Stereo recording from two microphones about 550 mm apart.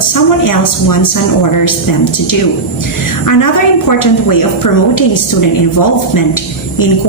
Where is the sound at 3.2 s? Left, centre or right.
Left.